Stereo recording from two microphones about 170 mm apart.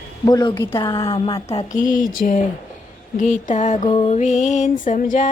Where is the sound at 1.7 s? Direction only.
50° left (ahead or behind).